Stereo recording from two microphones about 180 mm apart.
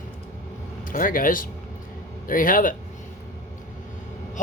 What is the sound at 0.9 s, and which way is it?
Speech, 50° left (ahead or behind).